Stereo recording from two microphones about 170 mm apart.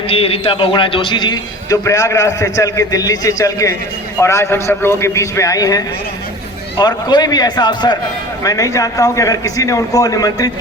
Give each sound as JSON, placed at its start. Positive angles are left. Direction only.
{"t": 0.1, "sound": "a man's voice", "side_deg": 35}